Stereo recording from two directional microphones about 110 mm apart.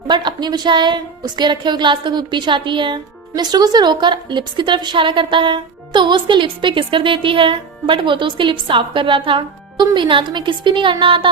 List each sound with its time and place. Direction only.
0.1 s a woman's voice: 45° right (ahead or behind)